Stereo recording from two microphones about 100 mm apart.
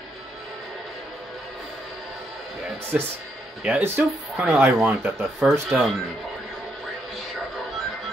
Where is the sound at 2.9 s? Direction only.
10° right (ahead or behind).